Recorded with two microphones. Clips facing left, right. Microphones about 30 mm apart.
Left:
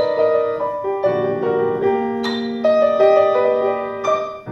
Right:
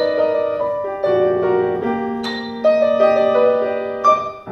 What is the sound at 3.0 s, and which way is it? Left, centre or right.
Music, centre.